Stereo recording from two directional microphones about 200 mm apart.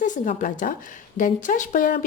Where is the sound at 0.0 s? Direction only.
40° left (ahead or behind).